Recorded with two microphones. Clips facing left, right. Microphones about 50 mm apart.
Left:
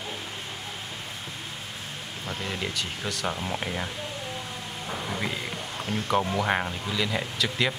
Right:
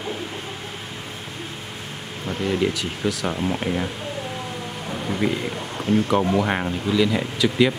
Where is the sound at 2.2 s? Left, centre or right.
Centre.